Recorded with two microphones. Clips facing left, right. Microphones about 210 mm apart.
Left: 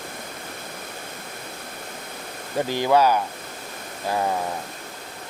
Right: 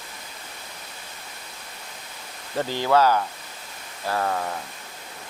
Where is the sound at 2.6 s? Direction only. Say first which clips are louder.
Left 1 dB; 15° left (ahead or behind).